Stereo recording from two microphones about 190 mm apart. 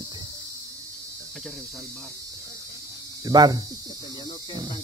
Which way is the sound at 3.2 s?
20° right (ahead or behind).